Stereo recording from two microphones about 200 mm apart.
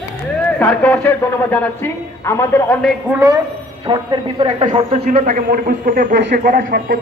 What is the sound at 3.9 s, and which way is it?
Speech, 25° right (ahead or behind).